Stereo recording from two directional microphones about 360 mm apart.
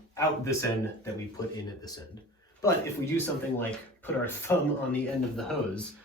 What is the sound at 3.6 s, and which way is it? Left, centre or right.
Speech, centre.